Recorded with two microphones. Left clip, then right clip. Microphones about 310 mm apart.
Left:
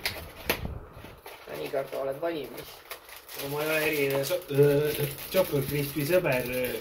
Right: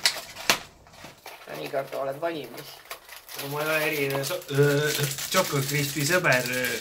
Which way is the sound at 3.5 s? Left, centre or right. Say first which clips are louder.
Right 2 dB; right.